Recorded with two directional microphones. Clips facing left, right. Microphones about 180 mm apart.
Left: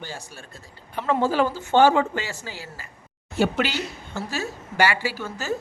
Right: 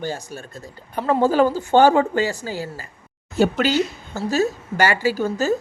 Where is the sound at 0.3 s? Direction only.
40° right (ahead or behind).